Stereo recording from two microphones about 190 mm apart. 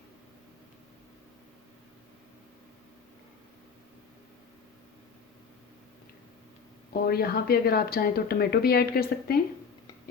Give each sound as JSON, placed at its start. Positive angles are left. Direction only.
{"t": 7.1, "sound": "speech", "side_deg": 55}